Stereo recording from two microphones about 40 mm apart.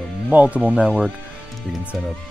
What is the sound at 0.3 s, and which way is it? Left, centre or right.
Speech, right.